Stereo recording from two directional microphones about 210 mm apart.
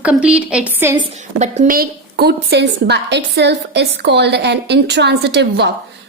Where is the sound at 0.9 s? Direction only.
35° right (ahead or behind).